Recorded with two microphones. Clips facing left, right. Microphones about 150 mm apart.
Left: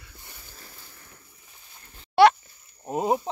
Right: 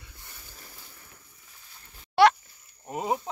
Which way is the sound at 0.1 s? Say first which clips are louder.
Left 2 dB; 15° left (ahead or behind).